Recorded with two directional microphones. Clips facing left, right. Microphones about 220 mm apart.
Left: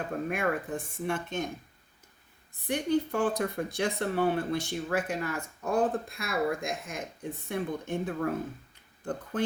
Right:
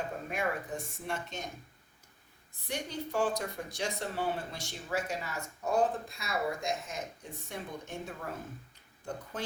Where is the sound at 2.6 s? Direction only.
55° left (ahead or behind).